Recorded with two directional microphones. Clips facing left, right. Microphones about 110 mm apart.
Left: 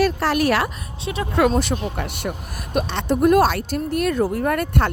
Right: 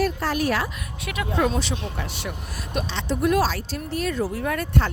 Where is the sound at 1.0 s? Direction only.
30° left (ahead or behind).